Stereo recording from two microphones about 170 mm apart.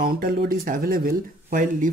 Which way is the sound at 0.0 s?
60° right (ahead or behind).